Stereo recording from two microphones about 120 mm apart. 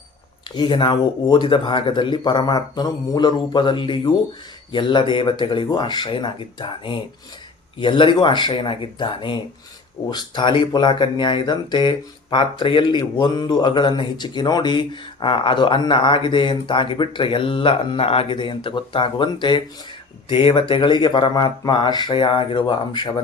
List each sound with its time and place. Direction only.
0.5 s speech: 40° left (ahead or behind)